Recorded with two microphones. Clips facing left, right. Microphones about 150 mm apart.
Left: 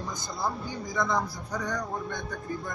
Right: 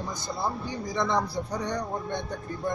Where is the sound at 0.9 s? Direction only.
30° right (ahead or behind).